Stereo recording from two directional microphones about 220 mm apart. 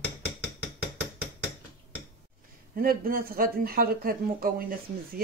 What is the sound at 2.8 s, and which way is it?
Speech, 40° right (ahead or behind).